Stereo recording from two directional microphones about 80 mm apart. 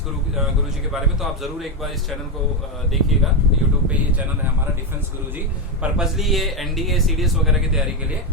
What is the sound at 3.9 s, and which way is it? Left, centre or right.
Speech, centre.